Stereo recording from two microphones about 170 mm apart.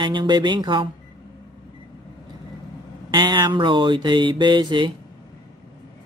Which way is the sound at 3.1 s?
30° right (ahead or behind).